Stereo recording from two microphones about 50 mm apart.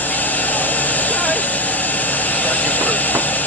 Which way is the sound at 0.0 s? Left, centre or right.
Left.